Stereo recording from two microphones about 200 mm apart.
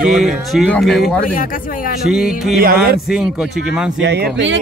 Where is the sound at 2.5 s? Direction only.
45° right (ahead or behind).